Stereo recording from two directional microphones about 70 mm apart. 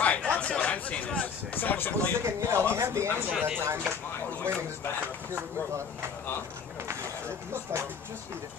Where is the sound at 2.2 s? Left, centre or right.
Right.